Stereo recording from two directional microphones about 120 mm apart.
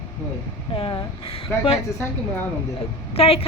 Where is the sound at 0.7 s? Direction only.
50° left (ahead or behind).